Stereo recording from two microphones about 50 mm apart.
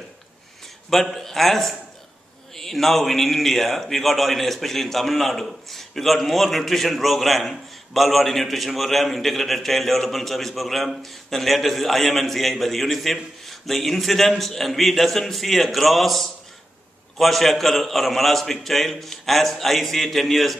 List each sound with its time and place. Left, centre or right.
1.1 s a man's voice: centre